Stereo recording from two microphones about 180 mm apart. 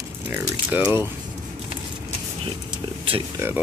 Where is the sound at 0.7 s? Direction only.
10° right (ahead or behind).